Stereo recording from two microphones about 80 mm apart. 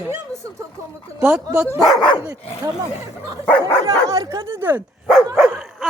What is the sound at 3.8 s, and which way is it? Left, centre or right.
Speech, right.